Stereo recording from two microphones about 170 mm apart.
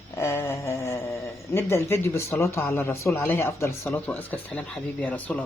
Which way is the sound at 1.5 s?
15° left (ahead or behind).